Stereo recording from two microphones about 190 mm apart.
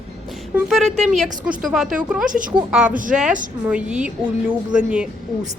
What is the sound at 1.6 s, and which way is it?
Speech, centre (ahead or behind).